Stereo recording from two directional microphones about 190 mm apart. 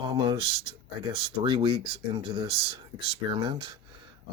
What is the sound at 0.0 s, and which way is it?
Speech, 25° right (ahead or behind).